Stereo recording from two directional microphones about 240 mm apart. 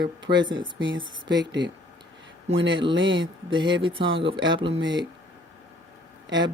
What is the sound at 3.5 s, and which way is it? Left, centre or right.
Speech, centre.